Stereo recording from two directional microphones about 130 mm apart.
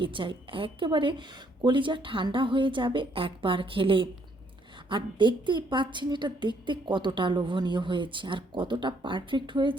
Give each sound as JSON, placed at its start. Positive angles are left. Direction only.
{"t": 0.0, "sound": "a woman's voice", "side_deg": -40}